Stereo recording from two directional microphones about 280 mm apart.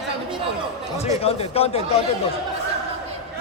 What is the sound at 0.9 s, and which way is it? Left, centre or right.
A man's voice, left.